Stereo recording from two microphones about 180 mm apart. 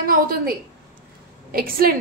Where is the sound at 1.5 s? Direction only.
55° right (ahead or behind).